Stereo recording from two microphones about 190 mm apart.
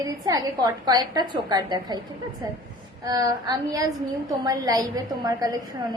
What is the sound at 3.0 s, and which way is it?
A woman's voice, 20° right (ahead or behind).